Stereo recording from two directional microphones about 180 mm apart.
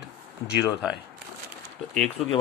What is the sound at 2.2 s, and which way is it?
Speech, 35° left (ahead or behind).